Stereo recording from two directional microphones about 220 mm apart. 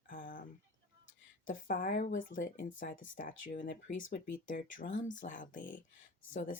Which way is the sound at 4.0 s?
60° left (ahead or behind).